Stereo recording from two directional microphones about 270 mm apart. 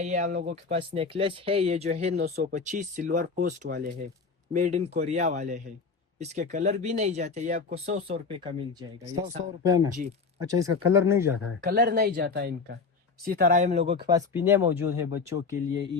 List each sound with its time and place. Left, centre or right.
0.0 s speech: right
2.1 s speech: right
4.5 s speech: right
11.6 s speech: right
14.1 s speech: centre